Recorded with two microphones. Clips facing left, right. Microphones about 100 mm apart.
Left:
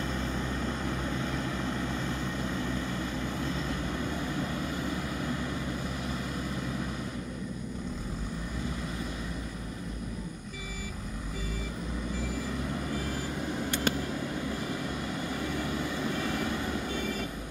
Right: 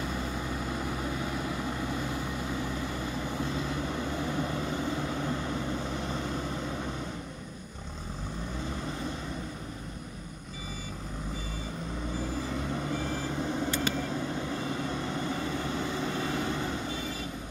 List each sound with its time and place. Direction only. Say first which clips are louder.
0.0 s vehicle: left 1 dB; 15° right (ahead or behind); by 6.3 s 30° right (ahead or behind)
12.9 s vehicle: right 2 dB; 25° right (ahead or behind)
13.9 s vehicle: left 2 dB; 55° left (ahead or behind)
14.3 s vehicle: right 1 dB; 25° right (ahead or behind)